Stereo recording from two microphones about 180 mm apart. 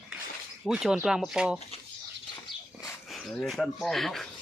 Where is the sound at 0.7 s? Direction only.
5° right (ahead or behind).